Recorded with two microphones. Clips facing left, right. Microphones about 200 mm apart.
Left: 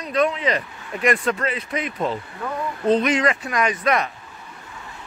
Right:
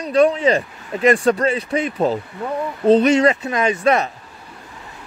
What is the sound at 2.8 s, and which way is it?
Speech, 30° right (ahead or behind).